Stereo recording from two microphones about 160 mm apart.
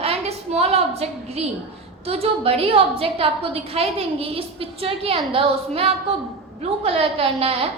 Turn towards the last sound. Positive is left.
turn(degrees=-35)  # may be behind; listen again after turning